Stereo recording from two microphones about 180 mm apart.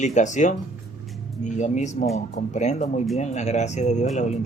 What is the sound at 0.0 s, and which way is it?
Speech, 40° left (ahead or behind).